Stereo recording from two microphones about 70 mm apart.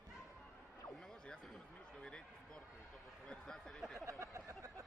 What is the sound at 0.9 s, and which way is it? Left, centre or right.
Speech, centre.